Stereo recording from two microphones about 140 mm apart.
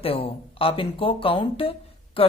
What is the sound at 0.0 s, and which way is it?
Speech, 40° left (ahead or behind).